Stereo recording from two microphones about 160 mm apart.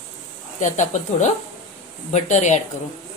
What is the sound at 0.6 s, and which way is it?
Speech, 50° left (ahead or behind).